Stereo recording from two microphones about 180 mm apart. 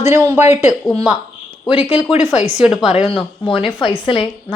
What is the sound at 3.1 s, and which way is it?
Speech, 30° left (ahead or behind).